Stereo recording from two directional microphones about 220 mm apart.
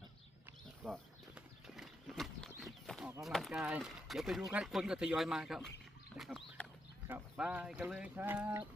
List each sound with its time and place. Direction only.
0.8 s speech: centre (ahead or behind)
1.4 s clip-clop: centre (ahead or behind)
3.1 s speech: centre (ahead or behind)
6.1 s a sound: centre (ahead or behind)
7.1 s speech: 5° right (ahead or behind)